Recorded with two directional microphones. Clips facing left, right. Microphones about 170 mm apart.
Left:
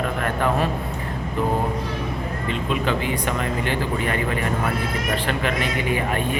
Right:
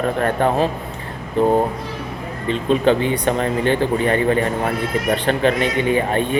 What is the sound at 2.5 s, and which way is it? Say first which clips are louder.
Speech: right 8 dB; 30° right (ahead or behind).